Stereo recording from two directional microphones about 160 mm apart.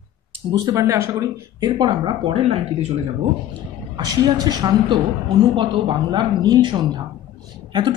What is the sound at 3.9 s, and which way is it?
Speech, 25° right (ahead or behind).